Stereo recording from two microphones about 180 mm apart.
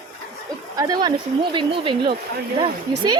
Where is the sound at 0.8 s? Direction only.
20° right (ahead or behind).